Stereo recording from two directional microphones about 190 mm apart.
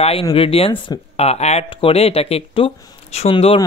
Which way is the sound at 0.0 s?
30° left (ahead or behind).